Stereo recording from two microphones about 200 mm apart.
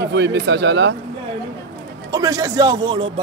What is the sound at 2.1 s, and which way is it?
Speech, 15° right (ahead or behind).